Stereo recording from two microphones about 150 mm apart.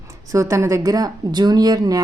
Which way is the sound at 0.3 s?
20° right (ahead or behind).